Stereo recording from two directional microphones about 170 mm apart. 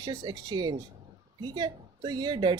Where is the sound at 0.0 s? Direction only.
25° right (ahead or behind).